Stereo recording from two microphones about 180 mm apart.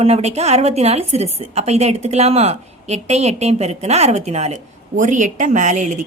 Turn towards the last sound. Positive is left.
turn(degrees=-40)  # may be behind; listen again after turning